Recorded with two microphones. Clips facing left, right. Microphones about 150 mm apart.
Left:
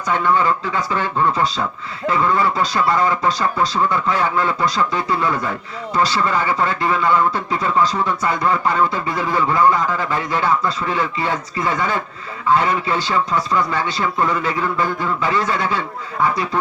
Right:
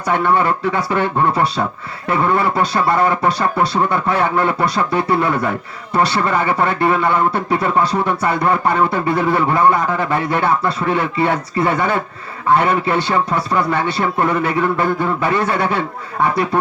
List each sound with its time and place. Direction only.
0.1 s a man's voice: 60° right (ahead or behind)